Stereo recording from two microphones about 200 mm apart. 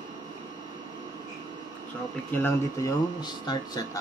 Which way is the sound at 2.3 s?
10° left (ahead or behind).